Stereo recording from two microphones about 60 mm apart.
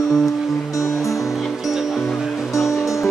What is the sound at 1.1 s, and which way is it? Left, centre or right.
Music, centre.